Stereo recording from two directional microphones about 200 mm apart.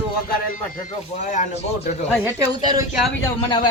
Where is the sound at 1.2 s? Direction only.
35° left (ahead or behind).